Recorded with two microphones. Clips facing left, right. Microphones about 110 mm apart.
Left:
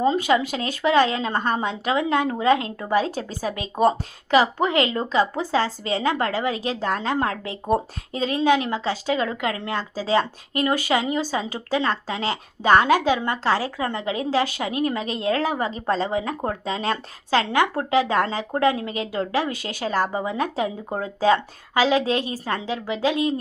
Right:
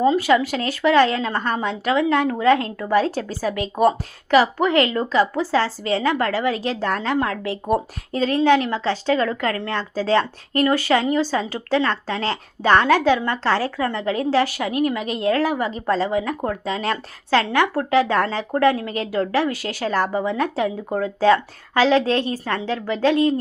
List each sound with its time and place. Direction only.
0.0 s a woman's voice: 25° left (ahead or behind)